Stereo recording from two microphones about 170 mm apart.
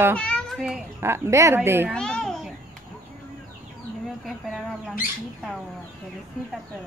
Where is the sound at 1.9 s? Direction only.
5° left (ahead or behind).